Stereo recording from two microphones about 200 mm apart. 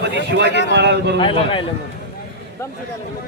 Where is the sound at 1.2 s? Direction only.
25° left (ahead or behind).